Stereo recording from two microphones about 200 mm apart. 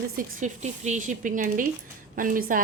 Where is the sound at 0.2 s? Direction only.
40° right (ahead or behind).